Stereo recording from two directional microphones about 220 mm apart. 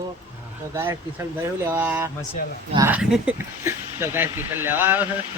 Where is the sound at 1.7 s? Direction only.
10° right (ahead or behind).